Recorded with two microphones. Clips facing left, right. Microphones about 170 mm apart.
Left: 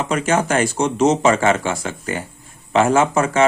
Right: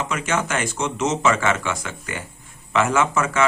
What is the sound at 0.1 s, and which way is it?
Speech, 35° left (ahead or behind).